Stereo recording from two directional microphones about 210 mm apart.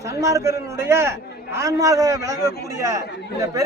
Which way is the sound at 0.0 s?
15° right (ahead or behind).